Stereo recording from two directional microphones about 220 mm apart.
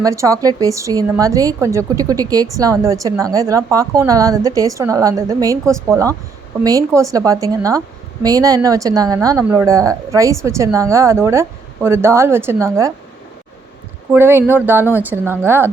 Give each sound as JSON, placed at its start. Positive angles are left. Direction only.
{"t": 0.0, "sound": "a woman's voice", "side_deg": -15}
{"t": 14.1, "sound": "a woman's voice", "side_deg": -10}